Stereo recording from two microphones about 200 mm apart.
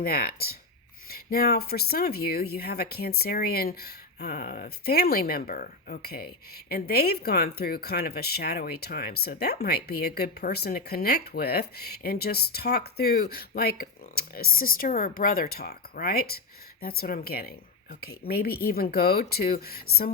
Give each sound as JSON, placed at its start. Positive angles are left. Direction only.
{"t": 0.0, "sound": "speech", "side_deg": 50}